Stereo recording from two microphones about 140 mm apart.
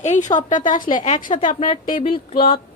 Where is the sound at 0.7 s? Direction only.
75° left (ahead or behind).